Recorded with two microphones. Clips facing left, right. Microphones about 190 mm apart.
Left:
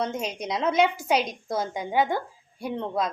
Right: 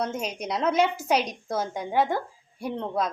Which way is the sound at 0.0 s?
10° right (ahead or behind).